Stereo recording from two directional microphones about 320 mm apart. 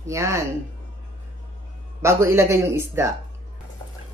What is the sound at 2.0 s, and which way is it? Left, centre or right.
Speech, centre.